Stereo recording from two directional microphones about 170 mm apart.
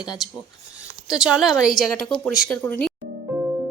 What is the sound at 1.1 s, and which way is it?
Speech, 5° right (ahead or behind).